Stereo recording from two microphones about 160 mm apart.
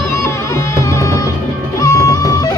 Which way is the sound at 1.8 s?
20° left (ahead or behind).